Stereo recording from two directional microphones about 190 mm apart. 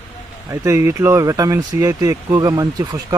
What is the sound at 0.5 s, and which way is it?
Speech, 15° right (ahead or behind).